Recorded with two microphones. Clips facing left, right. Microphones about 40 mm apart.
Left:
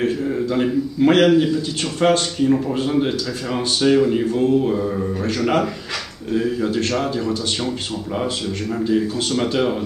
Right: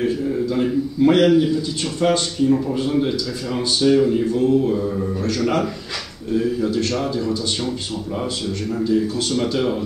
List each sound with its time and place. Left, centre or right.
0.6 s speech: left
3.8 s speech: left
6.3 s speech: left
8.8 s speech: left